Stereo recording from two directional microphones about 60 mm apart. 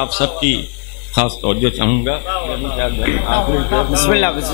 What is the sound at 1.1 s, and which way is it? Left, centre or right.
Speech, left.